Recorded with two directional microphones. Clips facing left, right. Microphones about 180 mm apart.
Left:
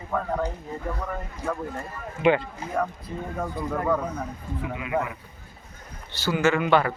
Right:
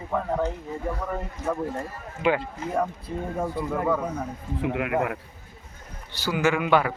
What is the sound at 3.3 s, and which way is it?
Speech, 5° right (ahead or behind).